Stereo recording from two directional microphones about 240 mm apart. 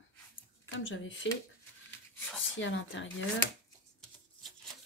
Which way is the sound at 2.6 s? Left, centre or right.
Left.